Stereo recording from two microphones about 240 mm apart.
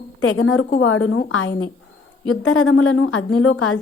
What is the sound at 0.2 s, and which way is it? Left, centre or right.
A woman's voice, left.